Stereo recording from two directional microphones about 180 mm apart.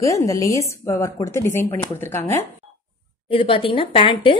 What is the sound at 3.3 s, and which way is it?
A woman's voice, 30° left (ahead or behind).